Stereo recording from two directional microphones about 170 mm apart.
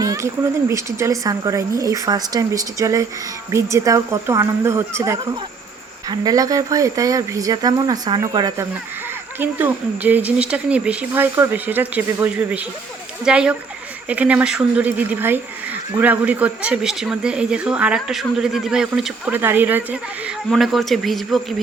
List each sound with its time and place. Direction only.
0.0 s a sound: 20° right (ahead or behind)
0.7 s speech: 20° right (ahead or behind)
9.4 s speech: 10° right (ahead or behind)
20.5 s speech: centre (ahead or behind)